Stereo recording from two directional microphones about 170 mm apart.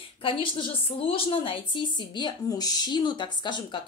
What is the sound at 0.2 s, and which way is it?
A woman's voice, 30° left (ahead or behind).